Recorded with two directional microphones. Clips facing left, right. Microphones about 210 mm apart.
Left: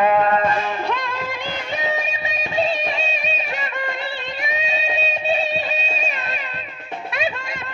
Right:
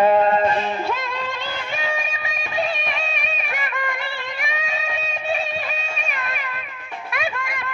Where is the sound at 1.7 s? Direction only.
20° left (ahead or behind).